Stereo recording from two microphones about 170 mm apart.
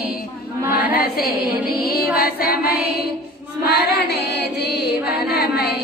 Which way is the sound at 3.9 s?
75° left (ahead or behind).